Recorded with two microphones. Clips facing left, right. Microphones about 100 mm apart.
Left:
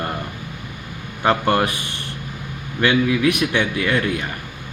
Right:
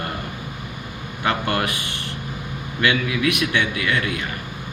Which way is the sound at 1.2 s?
30° left (ahead or behind).